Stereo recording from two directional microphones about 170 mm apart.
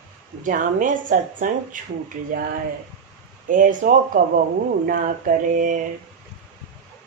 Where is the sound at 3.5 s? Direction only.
50° right (ahead or behind).